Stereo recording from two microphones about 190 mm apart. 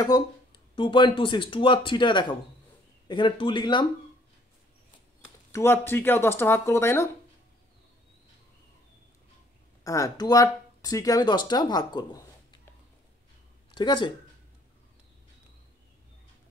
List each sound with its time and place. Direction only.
0.0 s speech: 20° left (ahead or behind)
5.5 s speech: 10° left (ahead or behind)
9.8 s speech: 20° left (ahead or behind)
13.7 s speech: 25° left (ahead or behind)